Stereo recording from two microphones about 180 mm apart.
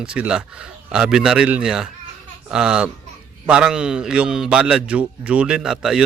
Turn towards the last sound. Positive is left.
turn(degrees=-5)  # may be behind; listen again after turning